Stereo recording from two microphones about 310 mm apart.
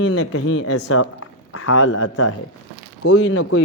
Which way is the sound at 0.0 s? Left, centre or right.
Left.